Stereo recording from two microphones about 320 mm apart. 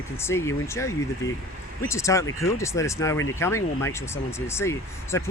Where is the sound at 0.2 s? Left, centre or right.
Centre.